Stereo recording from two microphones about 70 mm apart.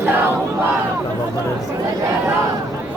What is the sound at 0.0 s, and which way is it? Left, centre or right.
Battle cry, right.